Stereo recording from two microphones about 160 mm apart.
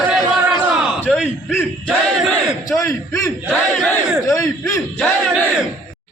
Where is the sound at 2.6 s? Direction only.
20° left (ahead or behind).